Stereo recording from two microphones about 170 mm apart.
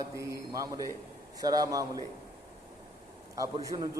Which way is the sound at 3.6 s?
20° right (ahead or behind).